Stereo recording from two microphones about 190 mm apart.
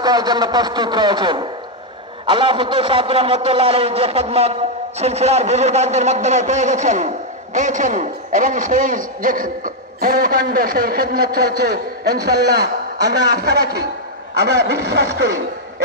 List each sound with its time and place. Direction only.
0.0 s a man's voice: 20° right (ahead or behind); by 15.3 s 60° right (ahead or behind)